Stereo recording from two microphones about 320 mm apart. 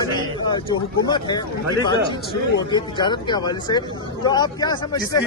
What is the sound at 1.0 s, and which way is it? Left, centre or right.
Speech, centre.